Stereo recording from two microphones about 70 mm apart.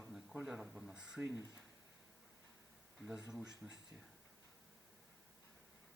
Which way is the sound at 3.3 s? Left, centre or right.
Centre.